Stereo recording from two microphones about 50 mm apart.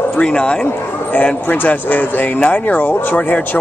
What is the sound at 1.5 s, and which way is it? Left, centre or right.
Speech, left.